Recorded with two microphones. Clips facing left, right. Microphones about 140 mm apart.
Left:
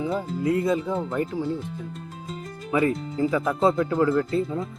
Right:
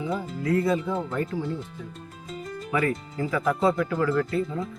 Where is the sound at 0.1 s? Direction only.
20° left (ahead or behind).